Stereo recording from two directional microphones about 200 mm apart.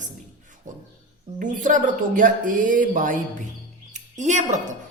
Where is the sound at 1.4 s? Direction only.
40° right (ahead or behind).